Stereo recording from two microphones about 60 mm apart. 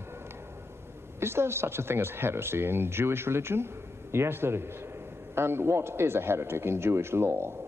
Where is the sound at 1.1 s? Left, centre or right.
Right.